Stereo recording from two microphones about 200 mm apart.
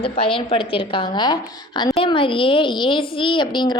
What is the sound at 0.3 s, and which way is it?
A woman's voice, 25° left (ahead or behind).